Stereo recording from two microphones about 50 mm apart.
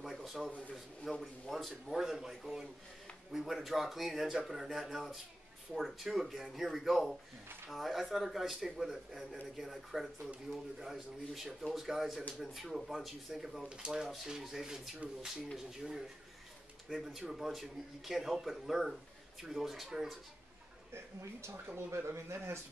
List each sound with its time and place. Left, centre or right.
0.0 s a sound: centre
1.1 s speech: centre
20.9 s speech: right